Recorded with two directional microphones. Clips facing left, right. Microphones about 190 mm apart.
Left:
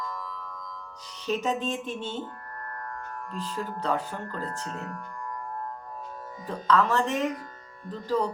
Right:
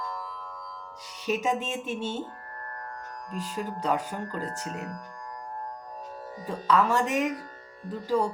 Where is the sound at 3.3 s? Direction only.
15° right (ahead or behind).